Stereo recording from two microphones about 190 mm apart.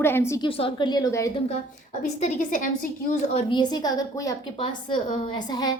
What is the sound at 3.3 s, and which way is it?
A woman's voice, 30° left (ahead or behind).